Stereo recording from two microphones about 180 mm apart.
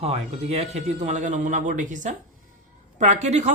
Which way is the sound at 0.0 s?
35° right (ahead or behind).